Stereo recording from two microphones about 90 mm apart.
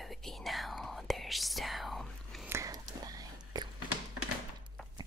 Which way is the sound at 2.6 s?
45° right (ahead or behind).